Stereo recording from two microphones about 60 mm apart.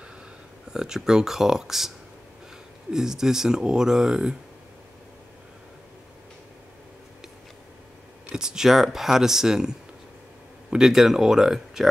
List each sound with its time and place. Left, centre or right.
0.7 s speech: centre
2.9 s speech: centre
8.3 s speech: centre
10.7 s speech: centre